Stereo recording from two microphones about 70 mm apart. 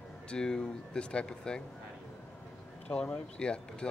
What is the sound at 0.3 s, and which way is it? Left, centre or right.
A man's voice, centre.